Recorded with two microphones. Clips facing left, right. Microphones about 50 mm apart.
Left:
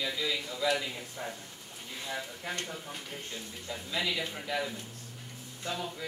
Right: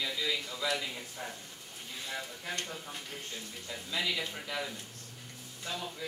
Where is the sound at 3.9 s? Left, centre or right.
Centre.